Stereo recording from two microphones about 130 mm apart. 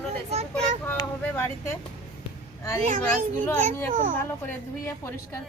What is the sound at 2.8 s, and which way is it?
Speech, 80° right.